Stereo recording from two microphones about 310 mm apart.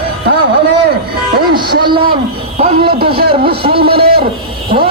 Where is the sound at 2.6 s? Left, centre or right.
Right.